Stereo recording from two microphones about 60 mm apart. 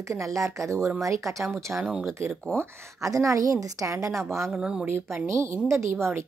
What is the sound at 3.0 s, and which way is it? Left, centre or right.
Speech, right.